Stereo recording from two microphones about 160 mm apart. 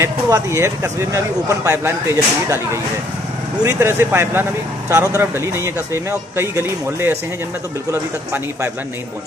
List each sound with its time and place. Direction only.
0.0 s speech: 15° right (ahead or behind)
6.3 s speech: 15° right (ahead or behind)